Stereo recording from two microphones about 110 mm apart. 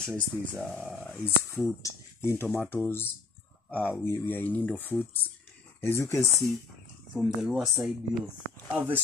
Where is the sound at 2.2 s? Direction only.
20° left (ahead or behind).